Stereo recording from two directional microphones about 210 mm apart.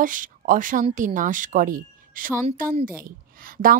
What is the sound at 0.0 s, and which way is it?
Speech, 40° right (ahead or behind).